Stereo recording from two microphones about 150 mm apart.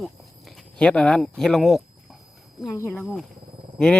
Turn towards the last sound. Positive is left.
turn(degrees=5)  # may be behind; listen again after turning